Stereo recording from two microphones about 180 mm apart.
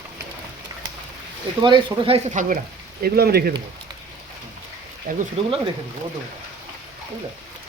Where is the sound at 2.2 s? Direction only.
45° right (ahead or behind).